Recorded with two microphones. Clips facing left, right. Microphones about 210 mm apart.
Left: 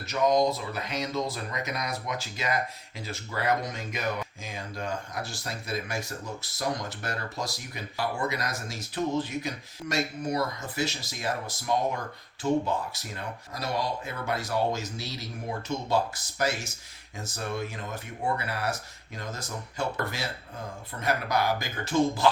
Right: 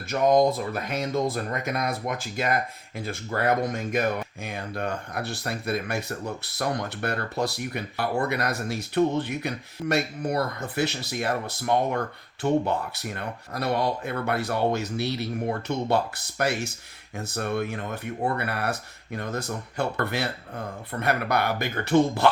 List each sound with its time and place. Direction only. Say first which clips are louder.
0.1 s speech: right 4 dB; 55° right (ahead or behind)
4.4 s speech: right 5 dB; 60° right (ahead or behind)